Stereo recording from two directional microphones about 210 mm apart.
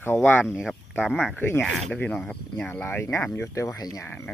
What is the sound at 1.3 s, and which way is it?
Speech, 10° left (ahead or behind).